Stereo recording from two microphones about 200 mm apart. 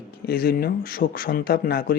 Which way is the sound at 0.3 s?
50° left (ahead or behind).